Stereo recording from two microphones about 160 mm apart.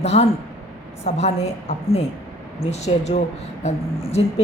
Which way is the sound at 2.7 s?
45° left (ahead or behind).